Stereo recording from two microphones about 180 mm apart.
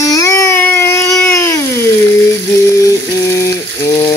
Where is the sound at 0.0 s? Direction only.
20° left (ahead or behind).